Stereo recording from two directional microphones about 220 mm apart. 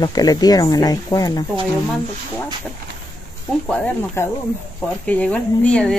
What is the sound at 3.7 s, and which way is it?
A woman's voice, 5° left (ahead or behind).